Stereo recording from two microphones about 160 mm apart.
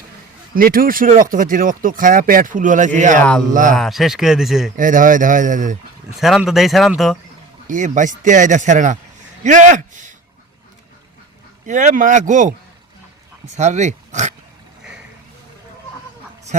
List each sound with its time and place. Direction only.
0.5 s speech: 65° right (ahead or behind)
3.2 s a sound: 5° left (ahead or behind)
3.5 s speech: 55° right (ahead or behind)
3.8 s speech: centre (ahead or behind)
4.8 s speech: 55° right (ahead or behind)
6.1 s speech: centre (ahead or behind)
7.7 s a man's voice: 50° right (ahead or behind)
11.6 s speech: 50° right (ahead or behind)
13.6 s speech: 45° right (ahead or behind)